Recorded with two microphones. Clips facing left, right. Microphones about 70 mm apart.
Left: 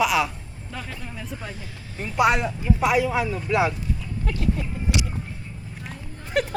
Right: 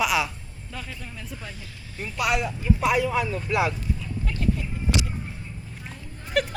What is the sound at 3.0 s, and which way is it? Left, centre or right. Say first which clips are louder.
Speech: left 1 dB; centre.